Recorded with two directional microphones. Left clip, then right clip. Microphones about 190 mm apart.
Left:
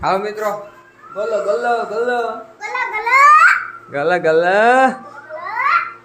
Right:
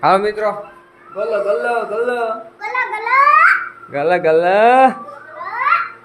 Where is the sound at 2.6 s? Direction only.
25° right (ahead or behind).